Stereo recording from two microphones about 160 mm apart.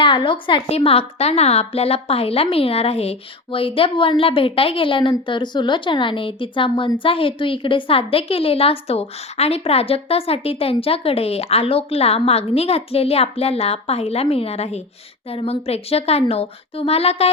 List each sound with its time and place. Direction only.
0.0 s a woman's voice: 30° left (ahead or behind)